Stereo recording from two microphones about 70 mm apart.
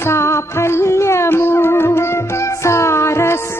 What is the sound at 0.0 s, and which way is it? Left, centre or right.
Music, left.